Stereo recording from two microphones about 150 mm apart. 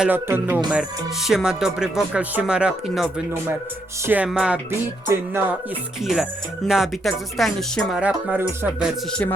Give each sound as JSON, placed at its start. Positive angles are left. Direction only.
{"t": 0.0, "sound": "music", "side_deg": -15}
{"t": 0.7, "sound": "speech", "side_deg": -5}
{"t": 4.0, "sound": "music", "side_deg": -10}
{"t": 4.3, "sound": "speech", "side_deg": -5}
{"t": 5.0, "sound": "music", "side_deg": -15}
{"t": 6.0, "sound": "speech", "side_deg": 0}
{"t": 9.0, "sound": "speech", "side_deg": 5}